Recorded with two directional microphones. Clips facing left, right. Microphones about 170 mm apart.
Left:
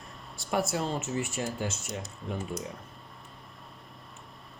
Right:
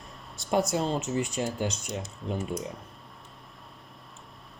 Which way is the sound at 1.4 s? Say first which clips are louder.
Right 3 dB; 20° right (ahead or behind).